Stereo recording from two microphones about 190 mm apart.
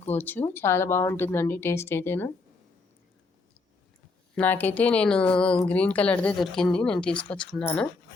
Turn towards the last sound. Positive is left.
turn(degrees=5)  # may be behind; listen again after turning